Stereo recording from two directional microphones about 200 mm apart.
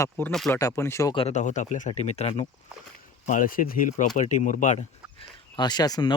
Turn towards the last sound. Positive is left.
turn(degrees=20)  # may be behind; listen again after turning